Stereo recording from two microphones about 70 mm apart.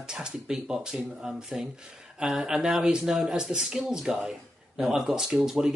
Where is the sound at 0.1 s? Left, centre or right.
Centre.